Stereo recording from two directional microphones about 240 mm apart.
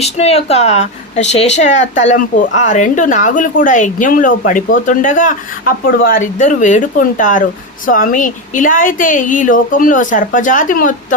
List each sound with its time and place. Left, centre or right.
0.0 s a woman's voice: left